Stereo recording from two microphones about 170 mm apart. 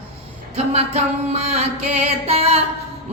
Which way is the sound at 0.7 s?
35° right (ahead or behind).